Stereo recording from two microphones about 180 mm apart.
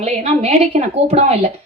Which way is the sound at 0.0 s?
40° right (ahead or behind).